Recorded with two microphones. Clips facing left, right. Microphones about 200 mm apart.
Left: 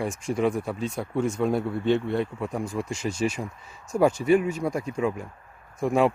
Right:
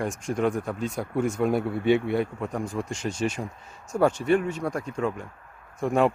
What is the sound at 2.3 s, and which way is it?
Speech, 5° left (ahead or behind).